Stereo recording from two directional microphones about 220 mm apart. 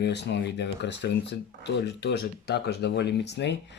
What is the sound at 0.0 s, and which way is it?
Speech, 50° left (ahead or behind).